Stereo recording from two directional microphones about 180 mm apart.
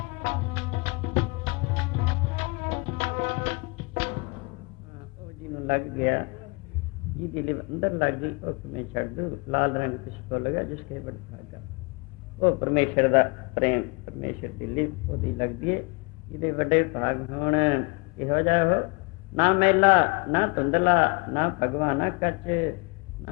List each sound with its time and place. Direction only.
0.1 s music: 45° right (ahead or behind)
5.5 s a man's voice: 40° right (ahead or behind)
7.3 s a man's voice: 40° right (ahead or behind)
12.5 s a man's voice: 40° right (ahead or behind)